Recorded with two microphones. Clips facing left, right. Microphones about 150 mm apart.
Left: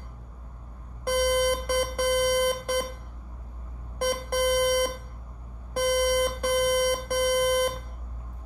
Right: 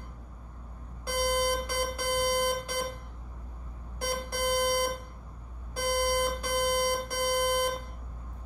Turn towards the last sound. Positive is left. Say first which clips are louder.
# left 5 dB
turn(degrees=60)  # may be behind; listen again after turning